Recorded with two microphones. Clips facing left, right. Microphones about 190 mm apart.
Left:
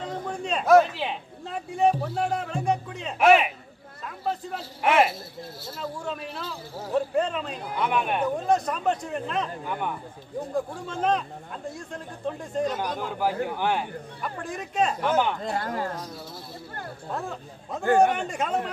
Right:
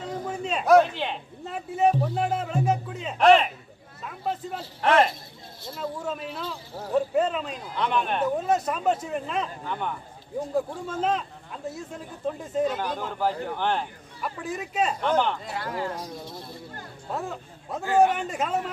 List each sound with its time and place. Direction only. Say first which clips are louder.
0.3 s a man's voice: even; 5° right (ahead or behind)
3.2 s speech: right 1 dB; 10° left (ahead or behind)
4.8 s speech: even; 10° left (ahead or behind)
5.8 s speech: right 2 dB; 5° right (ahead or behind)
6.4 s speech: right 1 dB; 10° left (ahead or behind)
7.2 s speech: right 1 dB; 5° right (ahead or behind)
8.5 s speech: even; 5° right (ahead or behind)
9.7 s speech: left 1 dB; 10° left (ahead or behind)
10.9 s speech: left 1 dB; 5° right (ahead or behind)
12.8 s speech: even; 10° left (ahead or behind)
14.2 s speech: right 3 dB; 5° right (ahead or behind)
15.0 s speech: right 2 dB; 10° left (ahead or behind)
15.4 s speech: left 2 dB; 50° left (ahead or behind)
17.1 s speech: right 2 dB; 5° right (ahead or behind)